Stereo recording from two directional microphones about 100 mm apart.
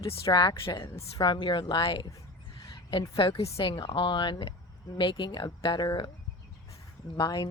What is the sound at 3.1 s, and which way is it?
A woman's voice, 70° left (ahead or behind).